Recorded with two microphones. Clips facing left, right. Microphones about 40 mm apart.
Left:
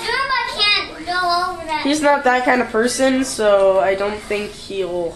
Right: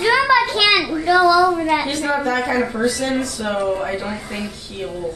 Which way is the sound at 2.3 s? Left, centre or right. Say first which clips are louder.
Left 4 dB; left.